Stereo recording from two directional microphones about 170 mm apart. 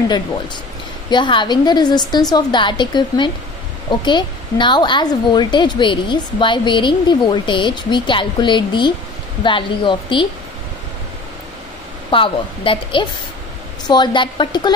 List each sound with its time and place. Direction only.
1.1 s a woman's voice: 30° left (ahead or behind)
12.1 s a woman's voice: 30° left (ahead or behind)